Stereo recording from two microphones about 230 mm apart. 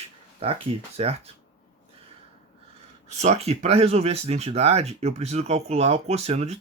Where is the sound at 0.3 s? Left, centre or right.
Right.